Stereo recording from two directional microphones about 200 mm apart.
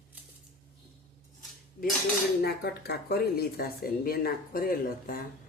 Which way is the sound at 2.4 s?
50° left (ahead or behind).